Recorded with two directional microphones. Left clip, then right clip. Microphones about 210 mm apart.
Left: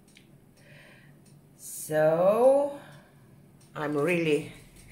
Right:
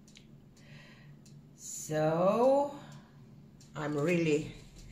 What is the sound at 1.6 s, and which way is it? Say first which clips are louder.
Speech: left 7 dB; 10° left (ahead or behind).